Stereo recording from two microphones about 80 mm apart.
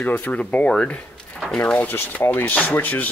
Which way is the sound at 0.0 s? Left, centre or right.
Centre.